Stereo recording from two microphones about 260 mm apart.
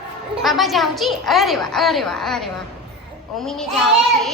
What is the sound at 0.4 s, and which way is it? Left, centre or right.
A child's voice, centre.